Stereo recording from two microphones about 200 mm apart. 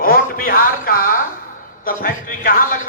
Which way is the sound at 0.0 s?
45° left (ahead or behind).